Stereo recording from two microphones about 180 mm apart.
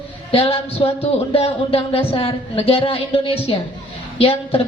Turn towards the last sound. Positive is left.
turn(degrees=30)  # may be behind; listen again after turning